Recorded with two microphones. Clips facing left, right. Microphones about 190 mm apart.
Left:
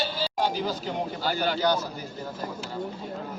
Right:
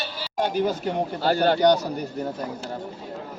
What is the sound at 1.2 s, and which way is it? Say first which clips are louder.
Speech: right 8 dB; 60° right (ahead or behind).